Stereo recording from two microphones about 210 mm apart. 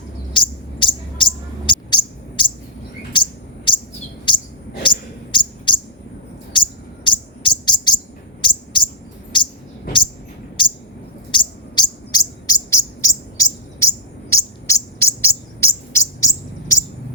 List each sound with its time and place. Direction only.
0.3 s a sound: 25° left (ahead or behind)
3.1 s bird: 25° left (ahead or behind)
4.8 s bird: 25° left (ahead or behind)
11.3 s bird: 20° left (ahead or behind)